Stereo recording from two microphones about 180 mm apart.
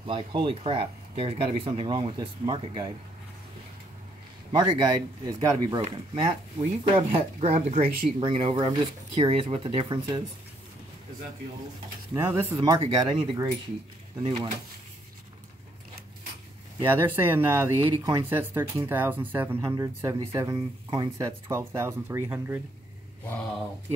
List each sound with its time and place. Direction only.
0.0 s speech: 30° right (ahead or behind)
4.5 s speech: 25° right (ahead or behind)
5.9 s speech: 30° right (ahead or behind)
12.1 s speech: 15° right (ahead or behind)
16.9 s speech: 10° right (ahead or behind)